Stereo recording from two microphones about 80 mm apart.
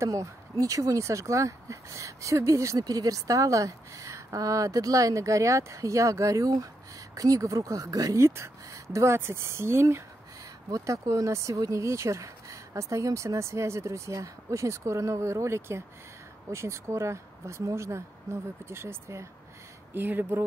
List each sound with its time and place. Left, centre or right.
0.0 s speech: right